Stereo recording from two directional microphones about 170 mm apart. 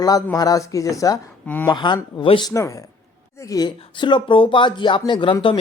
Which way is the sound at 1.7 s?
25° left (ahead or behind).